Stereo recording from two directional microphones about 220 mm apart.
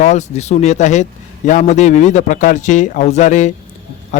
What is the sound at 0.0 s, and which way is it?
A man's voice, 30° left (ahead or behind).